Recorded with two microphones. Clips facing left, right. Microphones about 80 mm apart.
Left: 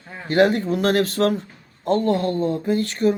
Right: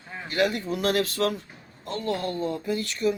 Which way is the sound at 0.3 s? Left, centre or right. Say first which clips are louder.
Left 8 dB; left.